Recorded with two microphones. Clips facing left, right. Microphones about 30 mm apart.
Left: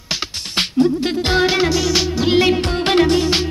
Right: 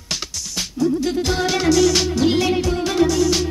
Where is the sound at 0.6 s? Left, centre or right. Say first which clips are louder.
Left 4 dB; left; by 2.3 s centre.